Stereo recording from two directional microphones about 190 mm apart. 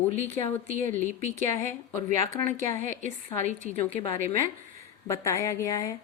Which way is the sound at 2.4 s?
45° right (ahead or behind).